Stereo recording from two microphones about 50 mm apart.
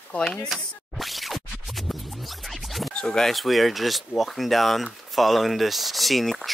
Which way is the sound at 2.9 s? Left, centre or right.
Centre.